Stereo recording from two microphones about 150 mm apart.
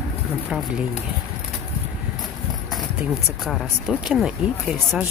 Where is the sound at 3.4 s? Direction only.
Centre (ahead or behind).